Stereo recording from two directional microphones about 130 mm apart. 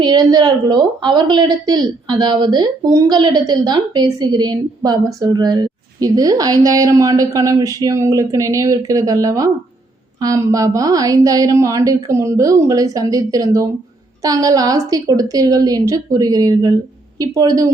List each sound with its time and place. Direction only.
0.0 s a woman's voice: 30° right (ahead or behind)